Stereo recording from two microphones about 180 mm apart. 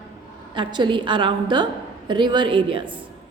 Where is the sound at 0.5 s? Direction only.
25° right (ahead or behind).